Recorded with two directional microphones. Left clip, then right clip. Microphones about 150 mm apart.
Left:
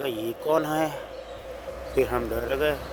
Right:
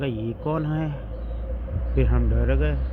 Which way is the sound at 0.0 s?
35° left (ahead or behind).